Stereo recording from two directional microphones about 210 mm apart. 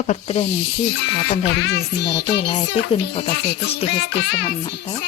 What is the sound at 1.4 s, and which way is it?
Speech, 55° left (ahead or behind).